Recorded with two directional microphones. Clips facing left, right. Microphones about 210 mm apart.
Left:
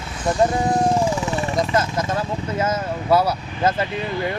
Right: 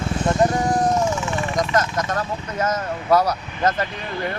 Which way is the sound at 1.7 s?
5° left (ahead or behind).